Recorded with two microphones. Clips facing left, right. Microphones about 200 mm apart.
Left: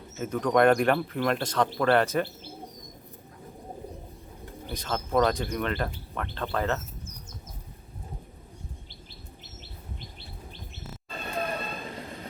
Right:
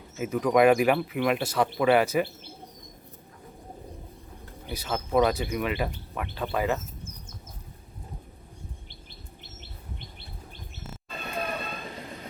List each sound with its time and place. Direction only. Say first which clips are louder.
0.2 s speech: right 1 dB; 5° right (ahead or behind)
4.7 s speech: right 1 dB; 10° right (ahead or behind)
11.3 s train: left 1 dB; centre (ahead or behind)
11.8 s vehicle: left 1 dB; centre (ahead or behind)